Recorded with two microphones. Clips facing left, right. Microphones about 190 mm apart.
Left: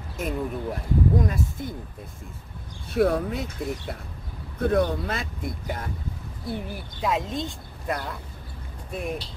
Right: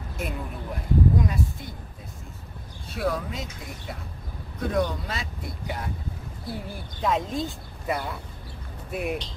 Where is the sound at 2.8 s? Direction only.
60° left (ahead or behind).